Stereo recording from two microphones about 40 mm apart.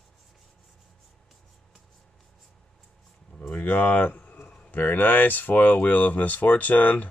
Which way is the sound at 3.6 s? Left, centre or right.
Left.